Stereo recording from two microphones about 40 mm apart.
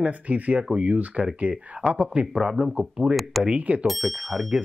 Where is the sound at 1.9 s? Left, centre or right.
Right.